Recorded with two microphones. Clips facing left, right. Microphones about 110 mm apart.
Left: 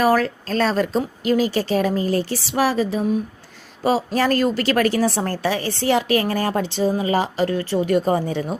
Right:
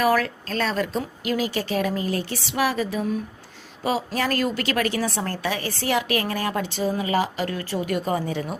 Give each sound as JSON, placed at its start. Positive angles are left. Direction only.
{"t": 0.0, "sound": "speech", "side_deg": 30}